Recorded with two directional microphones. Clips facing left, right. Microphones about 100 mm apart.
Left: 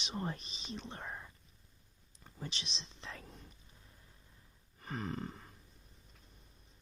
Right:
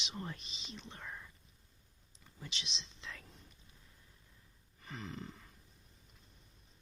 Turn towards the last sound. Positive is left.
turn(degrees=45)  # may be behind; listen again after turning